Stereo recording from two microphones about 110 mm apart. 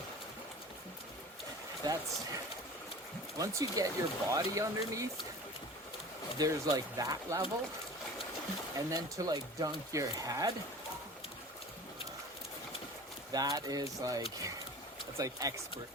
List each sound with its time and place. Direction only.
1.8 s speech: 30° right (ahead or behind)
6.4 s speech: 35° right (ahead or behind)
8.9 s speech: 35° right (ahead or behind)
13.3 s speech: 35° right (ahead or behind)